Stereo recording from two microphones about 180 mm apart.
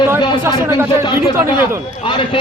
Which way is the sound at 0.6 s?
15° right (ahead or behind).